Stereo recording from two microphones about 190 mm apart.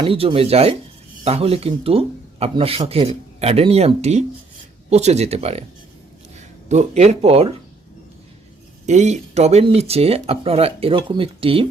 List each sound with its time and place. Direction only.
0.0 s speech: 30° right (ahead or behind)
6.7 s speech: 35° right (ahead or behind)
8.9 s speech: 40° right (ahead or behind)